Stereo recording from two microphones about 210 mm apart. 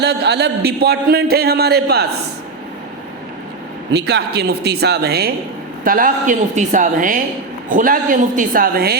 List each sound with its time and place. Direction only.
0.0 s speech: 50° right (ahead or behind)
3.9 s a woman's voice: 50° right (ahead or behind)